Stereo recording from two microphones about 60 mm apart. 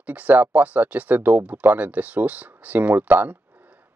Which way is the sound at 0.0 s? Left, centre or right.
Right.